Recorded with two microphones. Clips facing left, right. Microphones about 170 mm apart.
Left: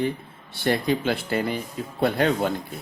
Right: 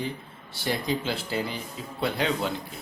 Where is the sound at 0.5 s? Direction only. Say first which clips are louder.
Left 5 dB; 60° left (ahead or behind).